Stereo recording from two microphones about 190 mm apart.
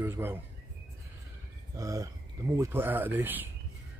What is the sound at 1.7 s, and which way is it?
Speech, 15° right (ahead or behind).